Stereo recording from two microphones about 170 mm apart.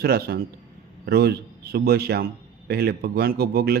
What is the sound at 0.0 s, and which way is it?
A man's voice, 65° right (ahead or behind).